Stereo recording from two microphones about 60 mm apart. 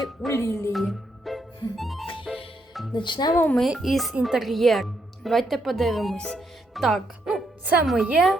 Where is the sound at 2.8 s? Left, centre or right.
Centre.